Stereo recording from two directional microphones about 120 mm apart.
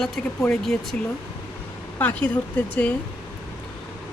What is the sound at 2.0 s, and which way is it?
Speech, 15° left (ahead or behind).